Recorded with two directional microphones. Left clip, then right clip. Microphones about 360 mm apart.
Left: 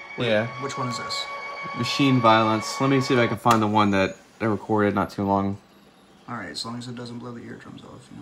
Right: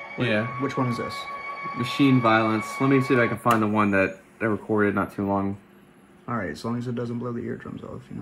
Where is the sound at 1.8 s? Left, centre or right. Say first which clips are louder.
Left 2 dB; left.